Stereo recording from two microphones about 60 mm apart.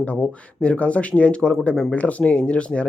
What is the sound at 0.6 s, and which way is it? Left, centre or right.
Speech, left.